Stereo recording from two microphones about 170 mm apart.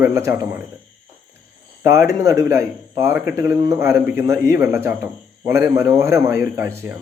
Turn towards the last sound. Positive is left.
turn(degrees=-15)  # may be behind; listen again after turning